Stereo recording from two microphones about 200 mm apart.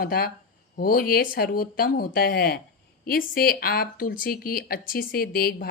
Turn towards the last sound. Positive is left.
turn(degrees=50)  # may be behind; listen again after turning